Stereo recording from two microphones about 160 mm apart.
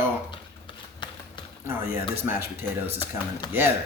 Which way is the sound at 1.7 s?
15° right (ahead or behind).